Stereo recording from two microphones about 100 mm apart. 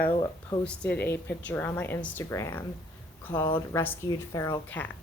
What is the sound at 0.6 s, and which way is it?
A woman's voice, 10° left (ahead or behind).